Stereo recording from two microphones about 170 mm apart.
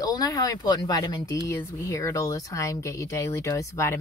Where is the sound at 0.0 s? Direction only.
20° left (ahead or behind).